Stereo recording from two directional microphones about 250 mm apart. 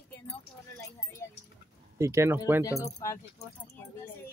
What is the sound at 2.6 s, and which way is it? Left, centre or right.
Speech, centre.